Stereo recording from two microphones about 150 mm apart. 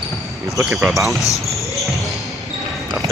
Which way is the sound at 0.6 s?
Centre (ahead or behind).